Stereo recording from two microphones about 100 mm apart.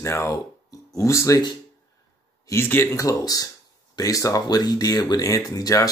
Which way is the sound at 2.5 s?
25° left (ahead or behind).